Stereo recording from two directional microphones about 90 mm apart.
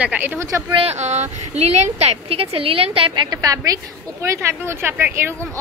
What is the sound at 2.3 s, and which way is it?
Speech, 90° right.